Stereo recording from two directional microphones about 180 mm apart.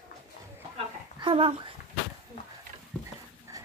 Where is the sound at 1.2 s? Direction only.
30° right (ahead or behind).